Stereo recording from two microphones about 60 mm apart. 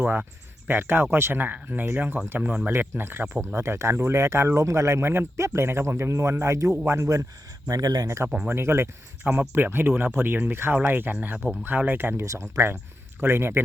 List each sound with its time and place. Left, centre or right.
0.0 s speech: right
2.6 s speech: right
7.7 s speech: right
8.4 s speech: right
9.2 s speech: right
12.2 s a man's voice: right